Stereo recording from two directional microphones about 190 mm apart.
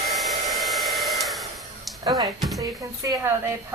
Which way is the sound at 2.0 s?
20° right (ahead or behind).